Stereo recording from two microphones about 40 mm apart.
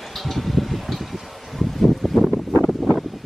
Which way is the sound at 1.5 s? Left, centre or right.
Centre.